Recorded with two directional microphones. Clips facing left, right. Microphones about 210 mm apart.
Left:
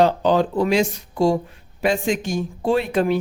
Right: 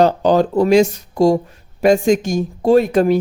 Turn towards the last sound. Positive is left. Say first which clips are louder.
# right 7 dB
turn(degrees=-40)  # may be behind; listen again after turning